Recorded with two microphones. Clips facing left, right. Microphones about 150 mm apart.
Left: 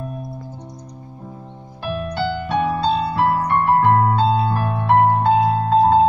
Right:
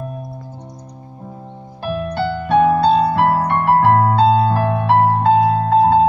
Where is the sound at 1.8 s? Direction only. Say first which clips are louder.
Right 3 dB; 50° right (ahead or behind); by 5.9 s 70° right (ahead or behind).